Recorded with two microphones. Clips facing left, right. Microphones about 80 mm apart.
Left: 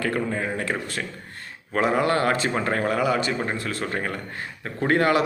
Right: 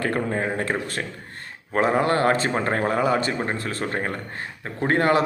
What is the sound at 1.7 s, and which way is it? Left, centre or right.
Speech, right.